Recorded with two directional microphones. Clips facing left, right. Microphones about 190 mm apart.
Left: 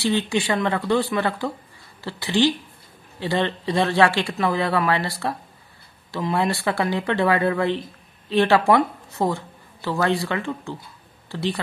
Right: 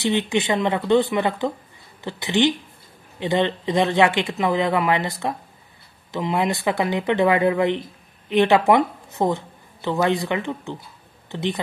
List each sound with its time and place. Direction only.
0.0 s speech: 20° right (ahead or behind)